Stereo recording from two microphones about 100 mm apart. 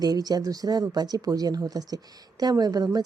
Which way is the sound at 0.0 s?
40° right (ahead or behind).